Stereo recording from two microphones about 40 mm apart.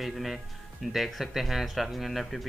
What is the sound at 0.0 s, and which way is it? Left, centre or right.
A man's voice, centre.